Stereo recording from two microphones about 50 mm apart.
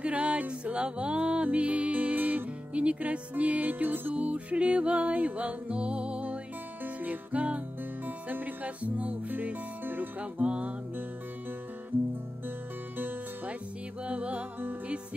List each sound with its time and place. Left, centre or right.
0.0 s music: right
2.7 s music: right
4.1 s music: right
6.8 s music: right
10.4 s music: right
12.9 s music: right
14.0 s music: right